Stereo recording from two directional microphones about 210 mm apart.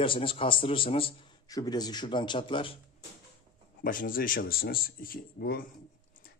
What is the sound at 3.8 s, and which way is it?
Speech, 40° left (ahead or behind).